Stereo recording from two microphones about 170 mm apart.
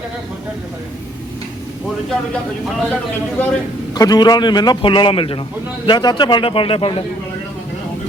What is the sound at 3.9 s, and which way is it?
A man's voice, 25° left (ahead or behind).